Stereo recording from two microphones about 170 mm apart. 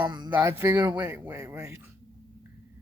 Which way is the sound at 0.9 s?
10° right (ahead or behind).